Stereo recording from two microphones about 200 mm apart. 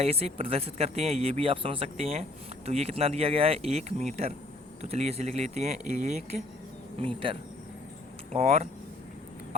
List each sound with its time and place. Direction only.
0.0 s speech: 30° right (ahead or behind)